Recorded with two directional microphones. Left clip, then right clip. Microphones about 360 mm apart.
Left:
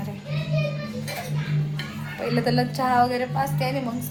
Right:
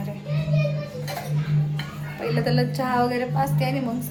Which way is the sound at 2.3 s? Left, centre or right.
Centre.